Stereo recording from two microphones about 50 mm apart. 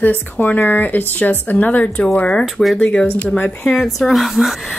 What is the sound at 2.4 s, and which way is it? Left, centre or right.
Speech, centre.